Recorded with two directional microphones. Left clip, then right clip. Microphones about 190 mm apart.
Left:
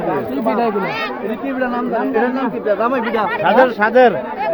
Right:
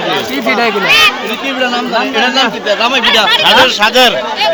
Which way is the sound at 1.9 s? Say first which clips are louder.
Right 5 dB; 20° right (ahead or behind).